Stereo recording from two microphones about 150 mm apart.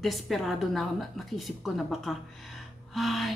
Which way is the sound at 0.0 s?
Centre (ahead or behind).